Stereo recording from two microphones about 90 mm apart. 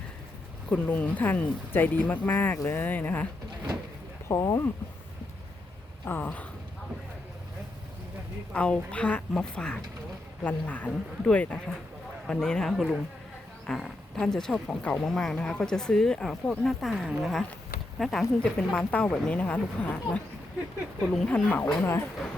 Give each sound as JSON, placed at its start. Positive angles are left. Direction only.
{"t": 0.7, "sound": "speech", "side_deg": 15}
{"t": 4.3, "sound": "speech", "side_deg": 35}
{"t": 6.1, "sound": "speech", "side_deg": 20}
{"t": 8.5, "sound": "speech", "side_deg": 15}
{"t": 21.5, "sound": "speech", "side_deg": 25}